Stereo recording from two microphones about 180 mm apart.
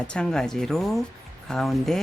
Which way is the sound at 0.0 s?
5° left (ahead or behind).